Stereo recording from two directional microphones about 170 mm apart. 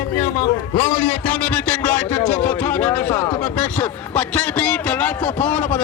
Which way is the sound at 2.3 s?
10° left (ahead or behind).